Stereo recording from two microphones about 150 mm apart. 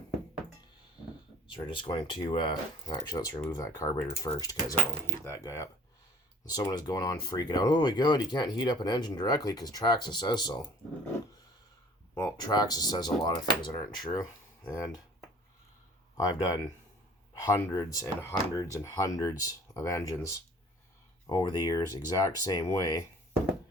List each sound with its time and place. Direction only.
1.5 s speech: 35° left (ahead or behind)
12.1 s speech: 25° left (ahead or behind)
16.1 s speech: 25° left (ahead or behind)